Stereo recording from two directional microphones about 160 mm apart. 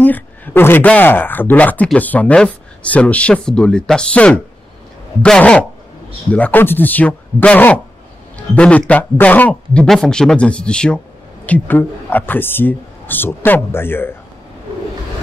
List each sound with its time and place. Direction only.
0.0 s speech: 10° left (ahead or behind)